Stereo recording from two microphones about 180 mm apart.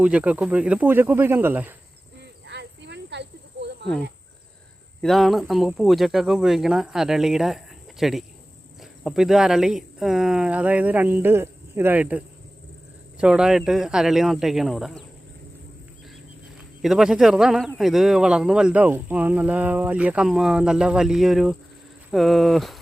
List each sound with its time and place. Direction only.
0.0 s speech: 5° right (ahead or behind)
2.5 s snake: 70° right (ahead or behind)
4.9 s a man's voice: centre (ahead or behind)
16.8 s a man's voice: 5° right (ahead or behind)